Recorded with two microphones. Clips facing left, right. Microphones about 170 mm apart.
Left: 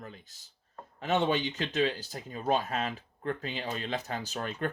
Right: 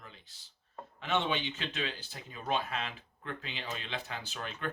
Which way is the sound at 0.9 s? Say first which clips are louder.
Left 5 dB; 40° left (ahead or behind).